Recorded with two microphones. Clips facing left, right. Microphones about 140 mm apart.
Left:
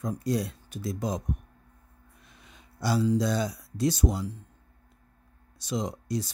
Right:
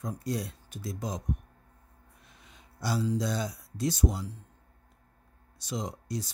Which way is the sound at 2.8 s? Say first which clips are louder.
Left 5 dB; 75° left (ahead or behind).